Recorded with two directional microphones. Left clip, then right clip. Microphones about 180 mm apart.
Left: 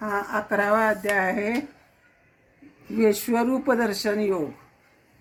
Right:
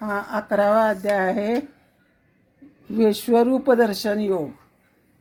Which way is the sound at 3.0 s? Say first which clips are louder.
Right 4 dB; 35° right (ahead or behind).